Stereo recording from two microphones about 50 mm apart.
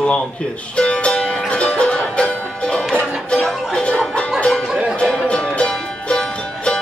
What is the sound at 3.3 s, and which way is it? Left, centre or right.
Music, centre.